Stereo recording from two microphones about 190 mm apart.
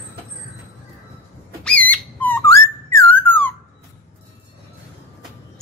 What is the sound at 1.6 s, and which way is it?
Squeak, 5° left (ahead or behind).